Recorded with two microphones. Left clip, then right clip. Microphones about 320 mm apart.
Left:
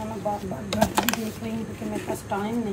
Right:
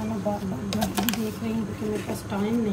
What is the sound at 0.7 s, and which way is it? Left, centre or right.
Typing, centre.